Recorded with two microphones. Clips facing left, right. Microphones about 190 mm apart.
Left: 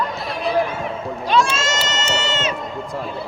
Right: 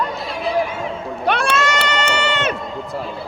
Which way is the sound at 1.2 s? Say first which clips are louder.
Even; 60° right (ahead or behind).